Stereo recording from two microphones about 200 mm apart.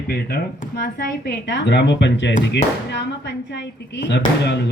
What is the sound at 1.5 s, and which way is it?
Speech, 60° left (ahead or behind).